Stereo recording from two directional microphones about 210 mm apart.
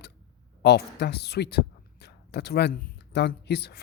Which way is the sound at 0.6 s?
50° left (ahead or behind).